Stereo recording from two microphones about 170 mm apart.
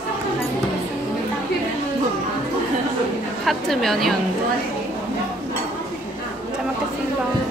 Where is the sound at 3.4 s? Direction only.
Centre (ahead or behind).